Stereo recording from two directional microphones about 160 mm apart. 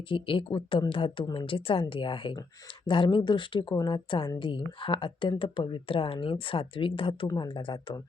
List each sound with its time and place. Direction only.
0.1 s speech: 35° left (ahead or behind)